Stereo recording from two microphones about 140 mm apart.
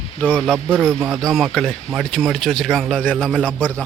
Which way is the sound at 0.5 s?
15° right (ahead or behind).